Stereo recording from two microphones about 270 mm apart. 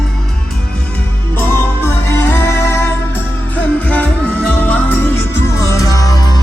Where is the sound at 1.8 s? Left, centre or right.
Centre.